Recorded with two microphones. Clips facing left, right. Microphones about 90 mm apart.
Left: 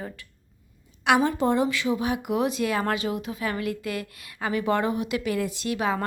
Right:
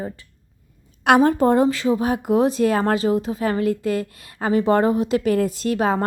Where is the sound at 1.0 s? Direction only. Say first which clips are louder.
Right 6 dB; 50° right (ahead or behind).